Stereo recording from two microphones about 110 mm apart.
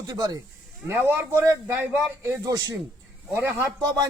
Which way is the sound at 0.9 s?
15° right (ahead or behind).